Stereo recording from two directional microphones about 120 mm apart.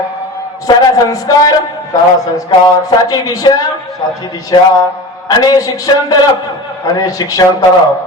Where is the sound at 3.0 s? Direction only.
30° left (ahead or behind).